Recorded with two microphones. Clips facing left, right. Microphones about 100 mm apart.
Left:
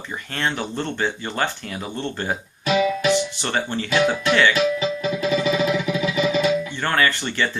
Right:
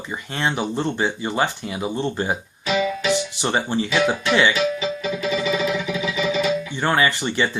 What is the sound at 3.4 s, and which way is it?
Speech, 15° right (ahead or behind).